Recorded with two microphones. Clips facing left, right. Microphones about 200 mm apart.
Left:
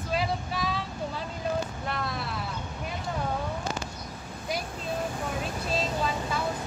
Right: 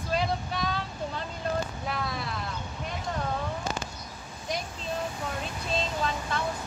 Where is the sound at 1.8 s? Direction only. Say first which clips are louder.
Even; centre (ahead or behind).